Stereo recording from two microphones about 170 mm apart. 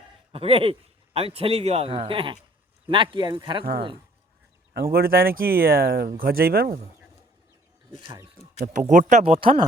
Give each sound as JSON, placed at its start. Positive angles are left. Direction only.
{"t": 0.3, "sound": "a man's voice", "side_deg": -35}
{"t": 4.7, "sound": "speech", "side_deg": -60}
{"t": 8.0, "sound": "speech", "side_deg": -20}
{"t": 8.9, "sound": "a man's voice", "side_deg": -45}